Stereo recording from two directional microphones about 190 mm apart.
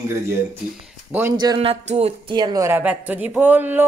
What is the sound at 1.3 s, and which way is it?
Speech, 25° right (ahead or behind).